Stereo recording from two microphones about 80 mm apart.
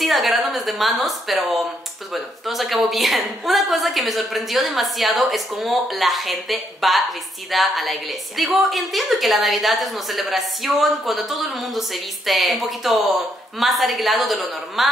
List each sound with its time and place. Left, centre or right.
0.0 s a woman's voice: centre